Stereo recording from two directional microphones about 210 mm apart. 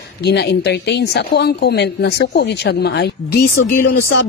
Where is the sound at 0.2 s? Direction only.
50° left (ahead or behind).